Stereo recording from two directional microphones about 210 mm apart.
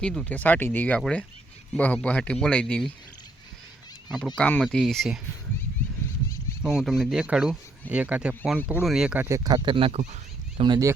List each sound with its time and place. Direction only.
0.0 s speech: centre (ahead or behind)
4.4 s speech: 5° left (ahead or behind)
6.6 s speech: 5° right (ahead or behind); by 10.2 s 30° right (ahead or behind)
10.6 s speech: 20° right (ahead or behind)